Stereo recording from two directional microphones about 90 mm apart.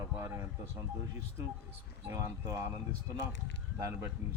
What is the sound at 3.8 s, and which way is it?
Speech, 30° right (ahead or behind).